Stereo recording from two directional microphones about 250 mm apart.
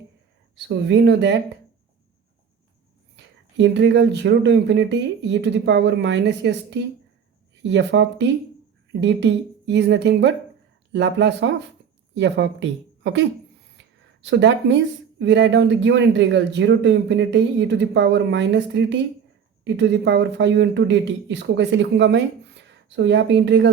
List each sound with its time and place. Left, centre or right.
0.5 s speech: right
3.6 s speech: right
13.7 s a sound: right
15.2 s speech: right